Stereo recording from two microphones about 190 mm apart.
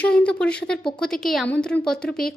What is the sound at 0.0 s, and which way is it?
A woman's voice, 5° left (ahead or behind).